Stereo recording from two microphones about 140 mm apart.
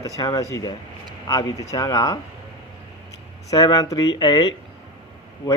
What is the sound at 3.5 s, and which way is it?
Speech, 25° left (ahead or behind).